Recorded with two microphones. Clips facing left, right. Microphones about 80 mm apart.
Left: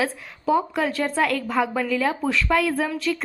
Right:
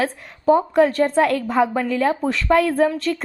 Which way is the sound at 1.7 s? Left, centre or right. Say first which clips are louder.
Right 3 dB; right.